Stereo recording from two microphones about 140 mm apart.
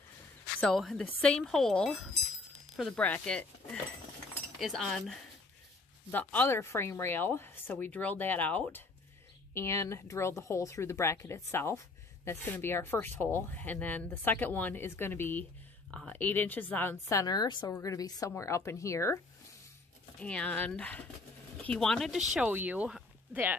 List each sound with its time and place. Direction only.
0.6 s speech: 5° left (ahead or behind)
4.6 s speech: centre (ahead or behind)
6.1 s speech: 15° left (ahead or behind)
20.2 s speech: 10° left (ahead or behind)
22.3 s speech: 10° right (ahead or behind)